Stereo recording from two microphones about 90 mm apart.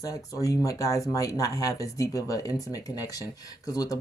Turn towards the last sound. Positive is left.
turn(degrees=45)  # may be behind; listen again after turning